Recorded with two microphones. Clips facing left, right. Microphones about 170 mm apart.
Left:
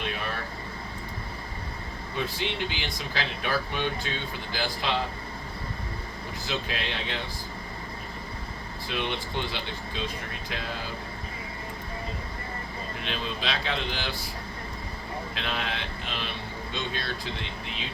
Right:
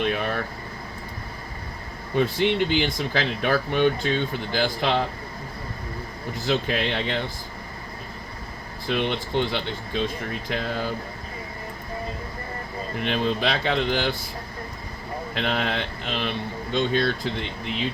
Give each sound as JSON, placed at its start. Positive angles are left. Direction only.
{"t": 0.0, "sound": "air conditioning", "side_deg": -55}
{"t": 2.1, "sound": "speech", "side_deg": -55}
{"t": 6.4, "sound": "speech", "side_deg": -55}
{"t": 8.9, "sound": "speech", "side_deg": -55}
{"t": 13.0, "sound": "speech", "side_deg": -55}
{"t": 15.4, "sound": "speech", "side_deg": -55}